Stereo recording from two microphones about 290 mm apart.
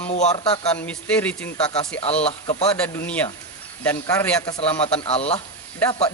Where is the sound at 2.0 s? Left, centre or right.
Left.